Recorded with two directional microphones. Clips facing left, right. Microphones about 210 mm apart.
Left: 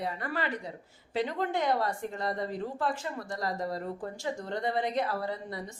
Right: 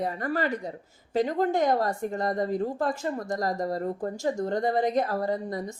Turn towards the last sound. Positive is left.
turn(degrees=-45)  # may be behind; listen again after turning